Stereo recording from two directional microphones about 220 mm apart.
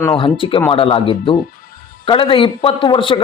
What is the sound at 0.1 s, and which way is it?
A man's voice, 25° left (ahead or behind).